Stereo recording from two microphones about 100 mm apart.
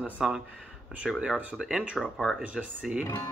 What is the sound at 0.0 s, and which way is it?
Speech, 5° right (ahead or behind).